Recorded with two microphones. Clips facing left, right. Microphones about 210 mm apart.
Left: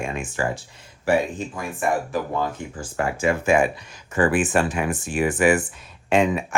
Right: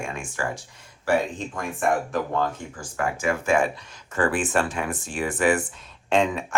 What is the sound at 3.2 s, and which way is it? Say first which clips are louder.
Speech: left 3 dB; 15° left (ahead or behind).